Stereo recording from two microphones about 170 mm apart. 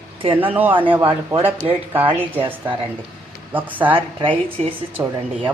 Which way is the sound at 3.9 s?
30° right (ahead or behind).